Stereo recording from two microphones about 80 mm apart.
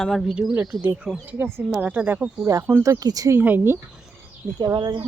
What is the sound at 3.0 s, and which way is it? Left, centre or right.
Speech, right.